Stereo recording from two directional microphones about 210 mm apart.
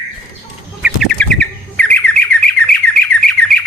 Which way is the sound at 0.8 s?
Centre (ahead or behind).